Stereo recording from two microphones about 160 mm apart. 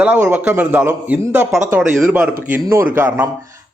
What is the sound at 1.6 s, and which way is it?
Speech, 50° right (ahead or behind).